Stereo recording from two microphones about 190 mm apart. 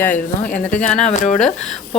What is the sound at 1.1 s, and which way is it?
Speech, 40° left (ahead or behind).